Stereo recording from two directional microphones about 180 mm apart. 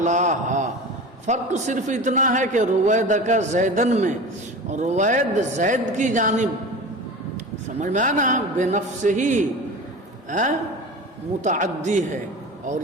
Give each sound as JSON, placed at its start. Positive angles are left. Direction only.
{"t": 0.0, "sound": "a man's voice", "side_deg": -40}
{"t": 7.8, "sound": "a man's voice", "side_deg": -45}